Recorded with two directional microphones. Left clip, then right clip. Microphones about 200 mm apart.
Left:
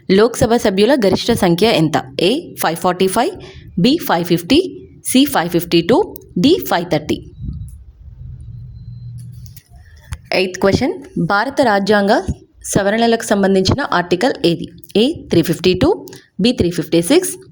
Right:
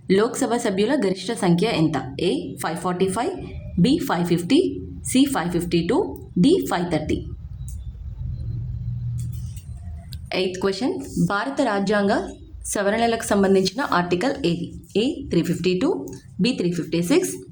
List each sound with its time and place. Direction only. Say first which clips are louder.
0.1 s a woman's voice: left 8 dB; 40° left (ahead or behind)
10.2 s a woman's voice: left 8 dB; 35° left (ahead or behind)